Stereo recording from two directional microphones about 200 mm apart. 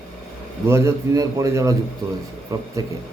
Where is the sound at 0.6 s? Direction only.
15° right (ahead or behind).